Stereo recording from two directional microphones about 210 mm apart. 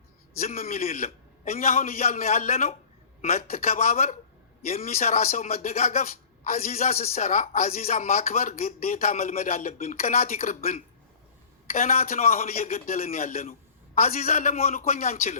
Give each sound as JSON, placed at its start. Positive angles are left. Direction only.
{"t": 0.3, "sound": "speech", "side_deg": 40}